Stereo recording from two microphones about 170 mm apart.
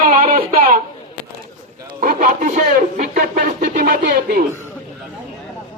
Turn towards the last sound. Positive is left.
turn(degrees=-60)  # may be behind; listen again after turning